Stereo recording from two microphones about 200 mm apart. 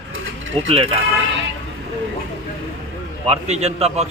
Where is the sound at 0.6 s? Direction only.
30° right (ahead or behind).